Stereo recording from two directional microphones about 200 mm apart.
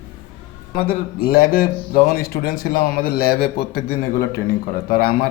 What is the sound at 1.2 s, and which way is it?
A man's voice, 50° left (ahead or behind).